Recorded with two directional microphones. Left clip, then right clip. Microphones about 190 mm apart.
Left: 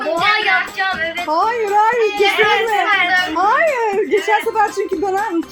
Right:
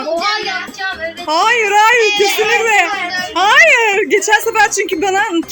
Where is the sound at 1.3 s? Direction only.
25° right (ahead or behind).